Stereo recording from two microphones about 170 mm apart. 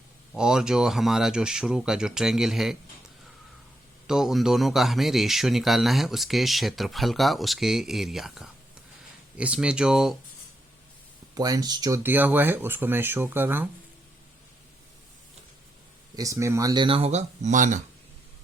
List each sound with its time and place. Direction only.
0.3 s speech: 5° right (ahead or behind)
4.0 s speech: 5° right (ahead or behind)
11.3 s speech: 20° right (ahead or behind)
12.0 s speech: 10° right (ahead or behind)
16.1 s speech: 20° right (ahead or behind); by 17.8 s 45° right (ahead or behind)